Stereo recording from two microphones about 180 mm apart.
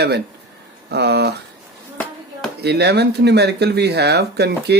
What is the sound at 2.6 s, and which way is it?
Speech, 65° right (ahead or behind).